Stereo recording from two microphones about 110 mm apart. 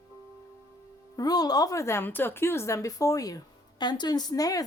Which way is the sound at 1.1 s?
35° left (ahead or behind).